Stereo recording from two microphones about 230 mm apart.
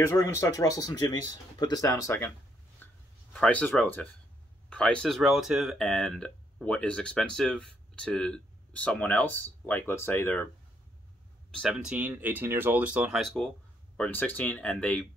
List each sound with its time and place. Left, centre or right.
0.0 s speech: centre
2.8 s a sound: centre
3.3 s speech: centre
11.5 s speech: centre